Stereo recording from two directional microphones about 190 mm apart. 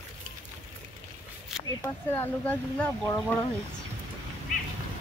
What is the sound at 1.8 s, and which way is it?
Speech, 15° left (ahead or behind).